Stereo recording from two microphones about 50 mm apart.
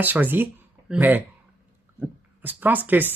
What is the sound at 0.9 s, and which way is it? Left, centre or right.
Speech, centre.